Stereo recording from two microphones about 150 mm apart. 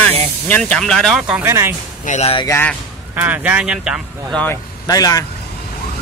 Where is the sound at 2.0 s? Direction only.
45° left (ahead or behind).